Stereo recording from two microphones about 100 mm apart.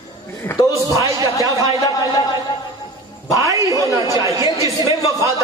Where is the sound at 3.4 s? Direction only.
35° right (ahead or behind).